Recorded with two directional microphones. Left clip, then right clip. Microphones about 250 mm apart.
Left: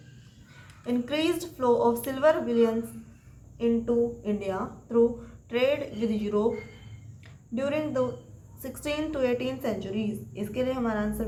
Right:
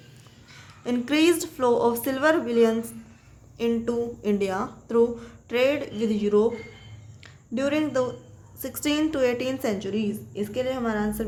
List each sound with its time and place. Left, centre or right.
0.9 s speech: right
7.5 s speech: right